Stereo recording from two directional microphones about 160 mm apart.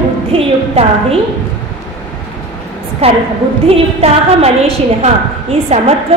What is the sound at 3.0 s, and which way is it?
A woman's voice, 40° right (ahead or behind).